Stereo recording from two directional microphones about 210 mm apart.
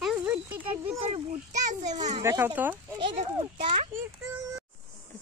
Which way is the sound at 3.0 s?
25° right (ahead or behind).